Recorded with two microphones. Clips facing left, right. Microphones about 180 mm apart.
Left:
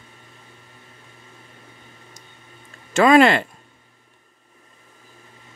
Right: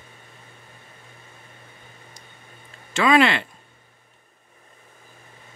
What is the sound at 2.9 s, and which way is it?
Speech, 45° left (ahead or behind).